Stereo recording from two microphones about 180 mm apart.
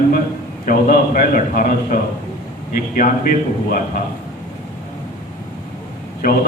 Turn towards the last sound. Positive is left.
turn(degrees=55)  # may be behind; listen again after turning